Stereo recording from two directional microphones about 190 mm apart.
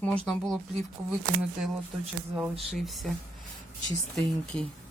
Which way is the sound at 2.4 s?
Centre (ahead or behind).